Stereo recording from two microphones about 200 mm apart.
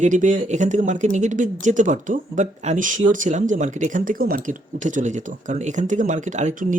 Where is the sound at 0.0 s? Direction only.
40° right (ahead or behind).